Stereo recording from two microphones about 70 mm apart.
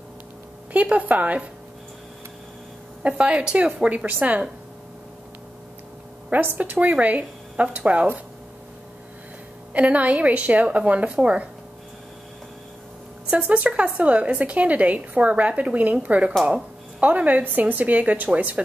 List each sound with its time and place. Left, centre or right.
0.7 s a woman's voice: right
3.0 s speech: centre
6.3 s a woman's voice: right
9.8 s a woman's voice: centre
13.3 s a woman's voice: right